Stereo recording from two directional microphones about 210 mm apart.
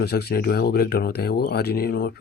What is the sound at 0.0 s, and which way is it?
Speech, 50° left (ahead or behind).